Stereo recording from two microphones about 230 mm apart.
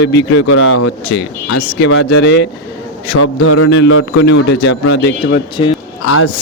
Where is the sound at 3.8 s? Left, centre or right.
Left.